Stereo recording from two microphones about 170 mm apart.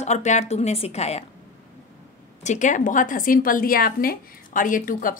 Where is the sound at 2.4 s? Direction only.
45° left (ahead or behind).